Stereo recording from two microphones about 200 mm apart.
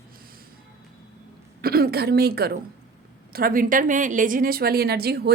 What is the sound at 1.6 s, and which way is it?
A woman's voice, 50° right (ahead or behind).